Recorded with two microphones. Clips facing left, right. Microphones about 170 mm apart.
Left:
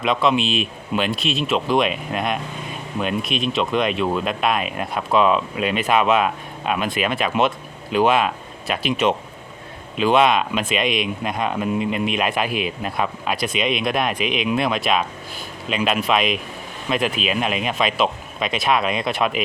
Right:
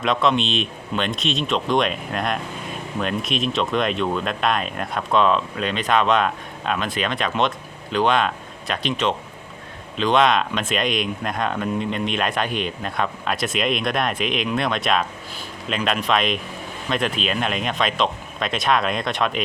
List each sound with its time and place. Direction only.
0.0 s speech: centre (ahead or behind)